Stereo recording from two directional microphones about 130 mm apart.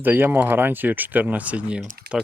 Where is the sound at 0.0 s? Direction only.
15° right (ahead or behind).